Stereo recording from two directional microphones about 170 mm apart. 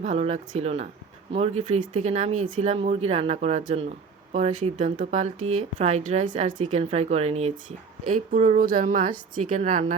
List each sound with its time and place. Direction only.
0.0 s a woman's voice: 40° right (ahead or behind)